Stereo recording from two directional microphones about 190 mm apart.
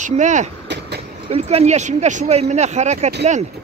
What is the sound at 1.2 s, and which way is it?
Speech, 35° right (ahead or behind).